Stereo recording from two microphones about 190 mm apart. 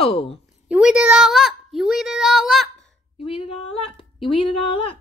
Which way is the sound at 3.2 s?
30° left (ahead or behind).